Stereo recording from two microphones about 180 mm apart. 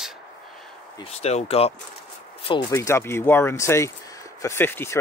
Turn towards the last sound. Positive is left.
turn(degrees=10)  # may be behind; listen again after turning